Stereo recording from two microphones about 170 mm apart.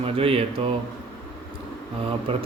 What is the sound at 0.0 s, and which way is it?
Speech, 35° right (ahead or behind).